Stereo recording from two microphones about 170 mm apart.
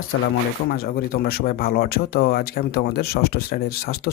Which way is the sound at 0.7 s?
65° left (ahead or behind).